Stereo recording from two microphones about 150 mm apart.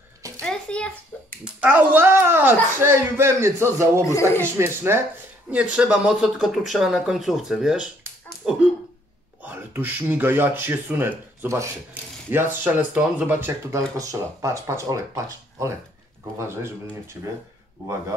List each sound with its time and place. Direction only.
0.4 s a sound: 5° left (ahead or behind)
1.4 s speech: 10° right (ahead or behind)
4.0 s speech: 20° left (ahead or behind)
4.4 s speech: 15° right (ahead or behind)
5.5 s speech: 5° right (ahead or behind)
16.3 s speech: 15° right (ahead or behind)